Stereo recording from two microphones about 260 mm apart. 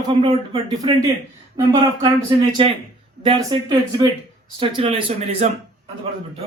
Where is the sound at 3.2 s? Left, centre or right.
Centre.